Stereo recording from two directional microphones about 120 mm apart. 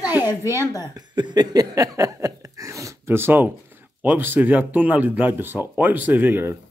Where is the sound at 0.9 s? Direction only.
35° right (ahead or behind); by 3.5 s 15° right (ahead or behind).